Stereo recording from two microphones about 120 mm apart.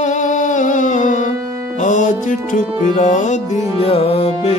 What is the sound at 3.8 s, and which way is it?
Music, 55° left (ahead or behind).